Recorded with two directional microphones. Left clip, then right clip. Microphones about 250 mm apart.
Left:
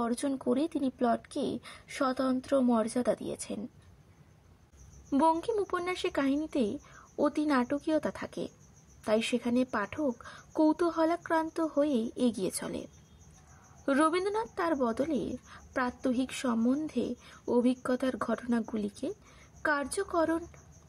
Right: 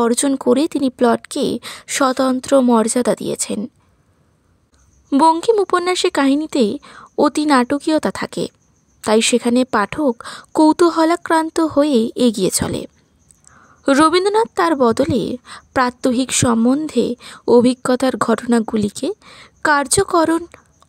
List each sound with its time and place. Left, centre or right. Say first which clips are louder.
0.0 s a woman's voice: right 16 dB; right
5.1 s a woman's voice: right 15 dB; right